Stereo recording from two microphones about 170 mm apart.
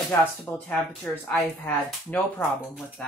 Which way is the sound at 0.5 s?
5° left (ahead or behind).